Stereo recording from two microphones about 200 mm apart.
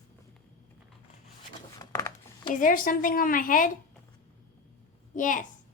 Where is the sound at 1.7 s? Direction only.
15° left (ahead or behind).